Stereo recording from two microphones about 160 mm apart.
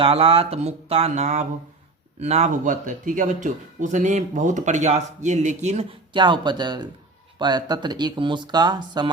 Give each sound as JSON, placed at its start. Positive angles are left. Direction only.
{"t": 0.0, "sound": "speech", "side_deg": -35}
{"t": 6.1, "sound": "speech", "side_deg": -30}